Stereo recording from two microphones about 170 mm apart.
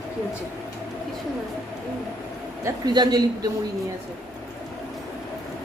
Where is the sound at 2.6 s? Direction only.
25° right (ahead or behind).